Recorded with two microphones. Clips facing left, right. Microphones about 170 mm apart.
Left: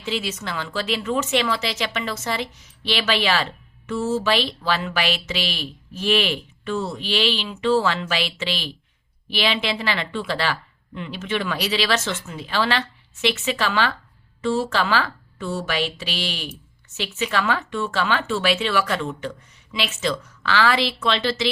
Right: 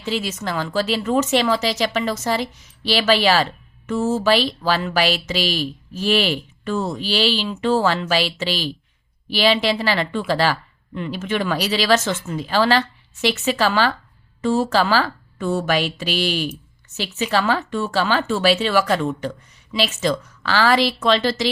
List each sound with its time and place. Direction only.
0.0 s speech: 40° right (ahead or behind)